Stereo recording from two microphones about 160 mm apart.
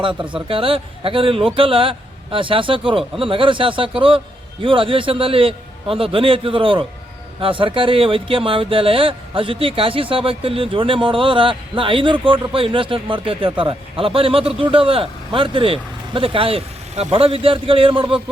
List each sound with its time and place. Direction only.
0.0 s speech: 30° right (ahead or behind)